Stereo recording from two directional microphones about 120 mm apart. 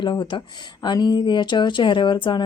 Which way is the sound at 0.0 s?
40° left (ahead or behind).